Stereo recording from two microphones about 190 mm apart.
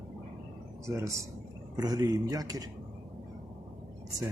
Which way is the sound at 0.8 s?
15° right (ahead or behind).